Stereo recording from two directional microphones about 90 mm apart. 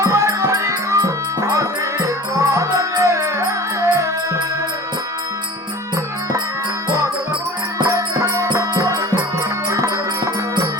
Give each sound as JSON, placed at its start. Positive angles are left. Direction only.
{"t": 0.0, "sound": "music", "side_deg": -35}
{"t": 7.9, "sound": "music", "side_deg": -35}